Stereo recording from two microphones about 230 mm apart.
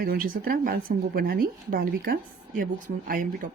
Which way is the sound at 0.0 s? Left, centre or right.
Right.